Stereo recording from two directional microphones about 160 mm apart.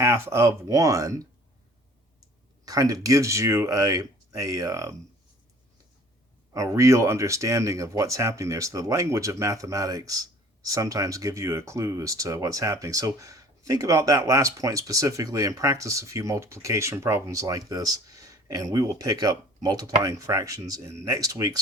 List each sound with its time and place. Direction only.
0.0 s speech: 15° right (ahead or behind)
2.6 s speech: 20° right (ahead or behind)
6.5 s speech: 20° right (ahead or behind)